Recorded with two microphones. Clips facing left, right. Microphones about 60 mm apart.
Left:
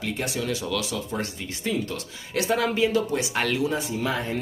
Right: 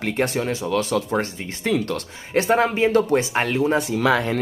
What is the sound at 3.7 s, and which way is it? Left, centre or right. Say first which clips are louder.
Speech: right 8 dB; right.